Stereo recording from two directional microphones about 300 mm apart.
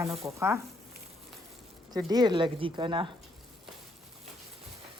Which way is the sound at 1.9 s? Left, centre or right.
Centre.